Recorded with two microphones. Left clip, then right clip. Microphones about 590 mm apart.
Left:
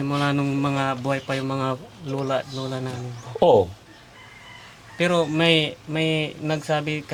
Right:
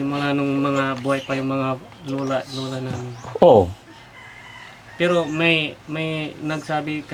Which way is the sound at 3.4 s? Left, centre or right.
Centre.